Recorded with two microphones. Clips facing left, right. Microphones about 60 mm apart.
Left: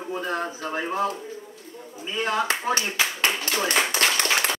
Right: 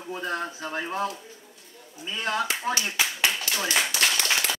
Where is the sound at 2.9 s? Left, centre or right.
Left.